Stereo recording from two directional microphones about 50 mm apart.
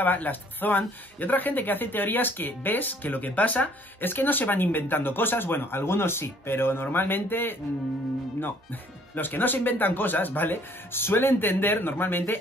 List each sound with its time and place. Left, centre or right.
0.0 s speech: left
9.1 s speech: left